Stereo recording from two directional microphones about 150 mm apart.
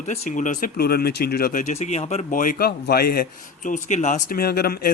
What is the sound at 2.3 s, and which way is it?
A man's voice, 60° left (ahead or behind).